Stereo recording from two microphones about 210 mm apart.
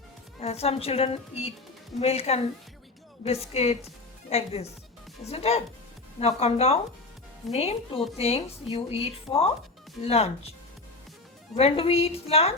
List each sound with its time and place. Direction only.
0.3 s a woman's voice: 30° left (ahead or behind)
11.5 s a woman's voice: 30° left (ahead or behind)